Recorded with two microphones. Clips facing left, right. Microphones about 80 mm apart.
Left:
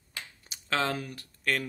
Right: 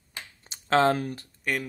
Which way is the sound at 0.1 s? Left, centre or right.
Right.